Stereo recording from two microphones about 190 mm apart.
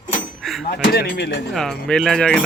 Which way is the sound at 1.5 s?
Centre (ahead or behind).